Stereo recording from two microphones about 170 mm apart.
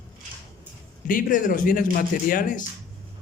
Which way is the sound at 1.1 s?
55° left (ahead or behind).